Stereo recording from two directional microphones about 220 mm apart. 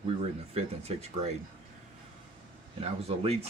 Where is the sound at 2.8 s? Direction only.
30° right (ahead or behind).